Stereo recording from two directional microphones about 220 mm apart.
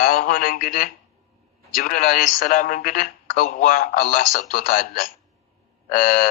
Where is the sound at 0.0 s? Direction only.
40° left (ahead or behind).